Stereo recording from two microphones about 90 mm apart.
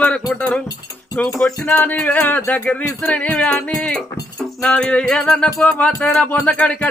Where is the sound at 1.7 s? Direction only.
15° left (ahead or behind).